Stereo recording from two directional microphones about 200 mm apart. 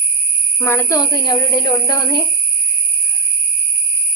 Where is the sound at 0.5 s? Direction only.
15° left (ahead or behind).